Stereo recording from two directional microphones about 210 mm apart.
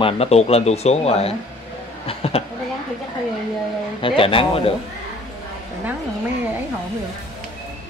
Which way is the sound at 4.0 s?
25° left (ahead or behind).